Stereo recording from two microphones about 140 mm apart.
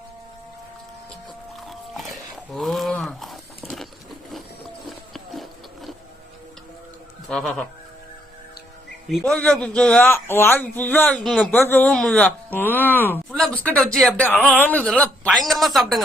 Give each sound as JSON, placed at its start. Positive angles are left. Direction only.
{"t": 1.6, "sound": "wild animals", "side_deg": 0}
{"t": 3.2, "sound": "a sound", "side_deg": 0}
{"t": 4.9, "sound": "a sound", "side_deg": 0}
{"t": 7.3, "sound": "speech", "side_deg": 5}
{"t": 9.0, "sound": "a man's voice", "side_deg": 0}
{"t": 11.2, "sound": "speech", "side_deg": 0}
{"t": 11.6, "sound": "a man's voice", "side_deg": 15}
{"t": 11.9, "sound": "a man's voice", "side_deg": 5}